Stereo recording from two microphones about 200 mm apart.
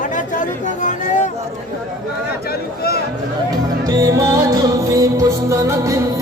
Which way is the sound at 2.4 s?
50° left (ahead or behind).